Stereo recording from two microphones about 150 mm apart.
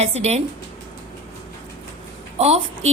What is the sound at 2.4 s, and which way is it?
Speech, 45° right (ahead or behind).